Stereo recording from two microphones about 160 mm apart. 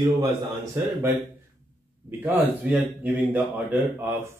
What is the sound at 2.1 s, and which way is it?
Speech, 10° right (ahead or behind).